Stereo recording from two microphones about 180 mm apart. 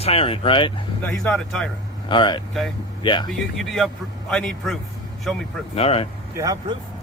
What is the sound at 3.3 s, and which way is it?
Speech, centre (ahead or behind).